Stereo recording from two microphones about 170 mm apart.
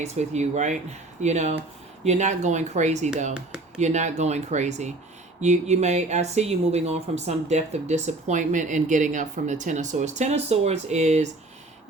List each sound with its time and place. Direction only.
0.0 s speech: 40° right (ahead or behind)